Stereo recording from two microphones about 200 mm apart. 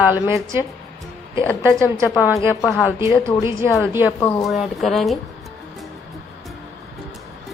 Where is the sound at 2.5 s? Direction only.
10° left (ahead or behind).